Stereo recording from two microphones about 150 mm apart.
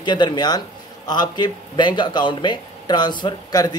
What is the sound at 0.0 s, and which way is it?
Speech, 30° left (ahead or behind).